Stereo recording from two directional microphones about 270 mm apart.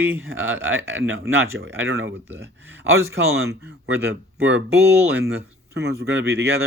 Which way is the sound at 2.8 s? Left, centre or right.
Right.